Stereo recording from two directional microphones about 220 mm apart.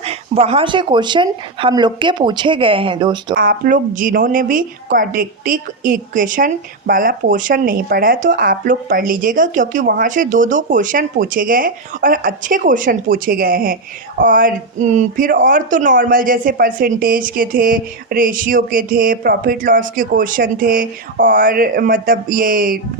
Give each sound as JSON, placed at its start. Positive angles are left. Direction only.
{"t": 0.0, "sound": "speech", "side_deg": -25}
{"t": 3.3, "sound": "a woman's voice", "side_deg": -40}